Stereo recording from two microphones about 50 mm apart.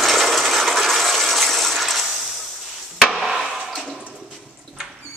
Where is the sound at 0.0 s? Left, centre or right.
Centre.